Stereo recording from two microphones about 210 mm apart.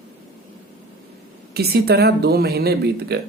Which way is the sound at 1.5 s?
50° right (ahead or behind).